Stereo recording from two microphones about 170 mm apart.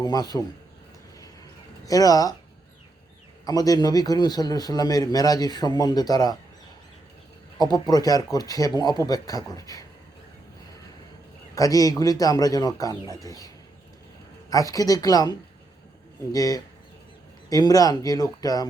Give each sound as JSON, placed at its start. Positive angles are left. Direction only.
{"t": 0.0, "sound": "a man's voice", "side_deg": 25}
{"t": 1.8, "sound": "a man's voice", "side_deg": 20}
{"t": 3.4, "sound": "a man's voice", "side_deg": 20}
{"t": 7.6, "sound": "a man's voice", "side_deg": 25}
{"t": 11.5, "sound": "a man's voice", "side_deg": 20}
{"t": 14.5, "sound": "a man's voice", "side_deg": 20}